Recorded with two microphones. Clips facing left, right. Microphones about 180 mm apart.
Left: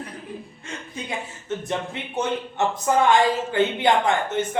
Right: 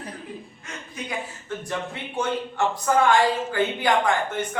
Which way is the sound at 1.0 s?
20° left (ahead or behind).